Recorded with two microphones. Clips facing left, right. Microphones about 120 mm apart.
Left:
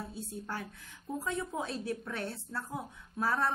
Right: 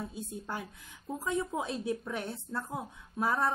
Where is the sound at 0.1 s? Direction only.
15° right (ahead or behind).